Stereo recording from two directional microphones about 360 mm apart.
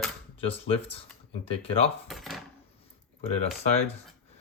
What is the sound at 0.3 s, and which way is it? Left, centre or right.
Speech, centre.